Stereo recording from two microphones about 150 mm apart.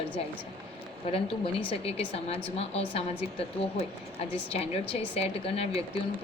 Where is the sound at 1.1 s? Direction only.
40° left (ahead or behind).